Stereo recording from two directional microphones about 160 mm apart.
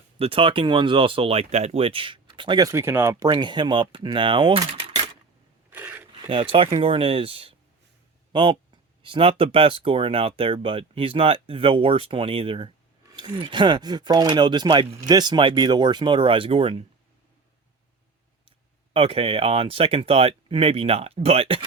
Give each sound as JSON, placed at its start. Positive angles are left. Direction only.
{"t": 0.2, "sound": "speech", "side_deg": -35}
{"t": 3.2, "sound": "speech", "side_deg": -30}
{"t": 5.7, "sound": "a sound", "side_deg": -10}
{"t": 6.2, "sound": "speech", "side_deg": -30}
{"t": 18.9, "sound": "speech", "side_deg": -35}